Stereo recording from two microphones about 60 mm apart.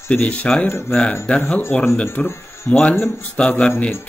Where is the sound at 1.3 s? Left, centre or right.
Left.